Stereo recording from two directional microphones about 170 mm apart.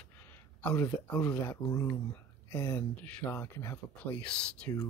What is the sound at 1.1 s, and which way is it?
Speech, 5° left (ahead or behind).